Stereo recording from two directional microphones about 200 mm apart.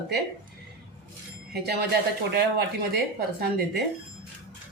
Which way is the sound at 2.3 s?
55° right (ahead or behind).